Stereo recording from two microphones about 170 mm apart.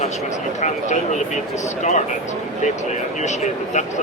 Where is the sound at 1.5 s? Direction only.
45° left (ahead or behind).